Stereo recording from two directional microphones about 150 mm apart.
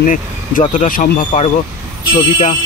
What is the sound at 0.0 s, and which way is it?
Speech, 60° left (ahead or behind).